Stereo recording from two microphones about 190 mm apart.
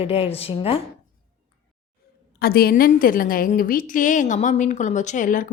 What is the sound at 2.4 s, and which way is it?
A woman's voice, 55° left (ahead or behind).